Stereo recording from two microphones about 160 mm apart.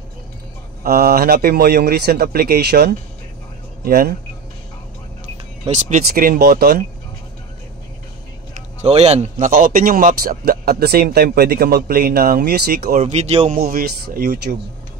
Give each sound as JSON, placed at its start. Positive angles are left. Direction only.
{"t": 0.8, "sound": "a man's voice", "side_deg": -70}
{"t": 3.8, "sound": "a man's voice", "side_deg": -70}
{"t": 5.2, "sound": "speech", "side_deg": -50}
{"t": 8.8, "sound": "speech", "side_deg": -40}
{"t": 9.4, "sound": "a man's voice", "side_deg": -60}
{"t": 13.0, "sound": "a man's voice", "side_deg": -40}
{"t": 13.6, "sound": "a man's voice", "side_deg": -70}